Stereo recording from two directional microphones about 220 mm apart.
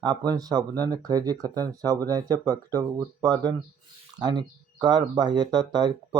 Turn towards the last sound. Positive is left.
turn(degrees=-20)  # may be behind; listen again after turning